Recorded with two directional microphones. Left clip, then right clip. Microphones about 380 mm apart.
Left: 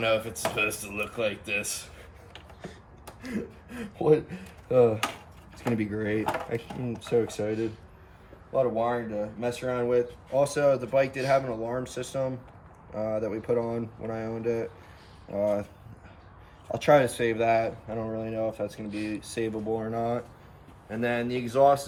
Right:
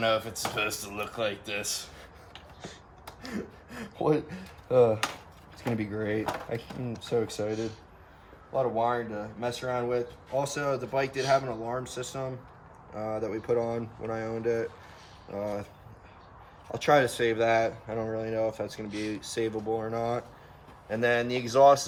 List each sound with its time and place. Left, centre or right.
0.0 s speech: centre
3.2 s speech: centre
9.4 s speech: centre
16.7 s speech: centre